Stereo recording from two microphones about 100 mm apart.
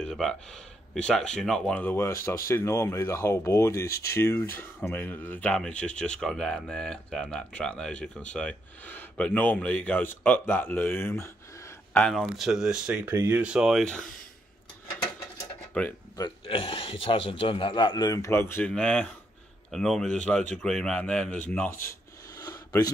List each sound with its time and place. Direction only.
0.0 s speech: 5° left (ahead or behind)
1.8 s speech: 20° left (ahead or behind)
12.0 s speech: 5° left (ahead or behind)
13.1 s speech: 30° right (ahead or behind)
13.4 s speech: 10° right (ahead or behind)
15.7 s speech: 15° left (ahead or behind)
16.4 s a man's voice: 65° left (ahead or behind); by 18.3 s 40° left (ahead or behind)
18.3 s speech: 25° left (ahead or behind)
18.7 s speech: 10° left (ahead or behind)
22.4 s a sound: 35° left (ahead or behind)